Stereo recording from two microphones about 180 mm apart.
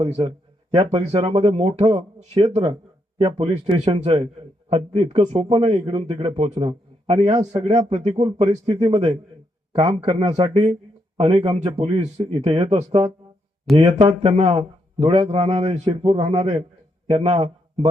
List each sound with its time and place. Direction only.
0.0 s a man's voice: 35° right (ahead or behind)